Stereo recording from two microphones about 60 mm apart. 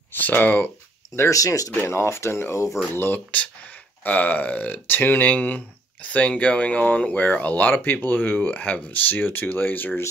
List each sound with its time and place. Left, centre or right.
0.1 s speech: left
1.1 s speech: left
1.7 s speech: left
4.0 s speech: left